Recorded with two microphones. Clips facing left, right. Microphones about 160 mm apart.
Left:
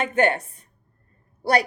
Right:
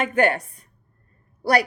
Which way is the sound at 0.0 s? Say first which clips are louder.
Right 1 dB; 25° left (ahead or behind).